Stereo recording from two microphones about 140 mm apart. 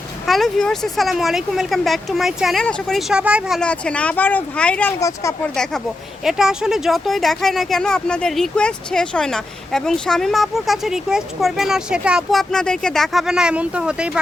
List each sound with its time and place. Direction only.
0.3 s speech: centre (ahead or behind)
3.6 s speech: 10° left (ahead or behind)
4.9 s speech: 25° left (ahead or behind)
6.2 s speech: 5° right (ahead or behind)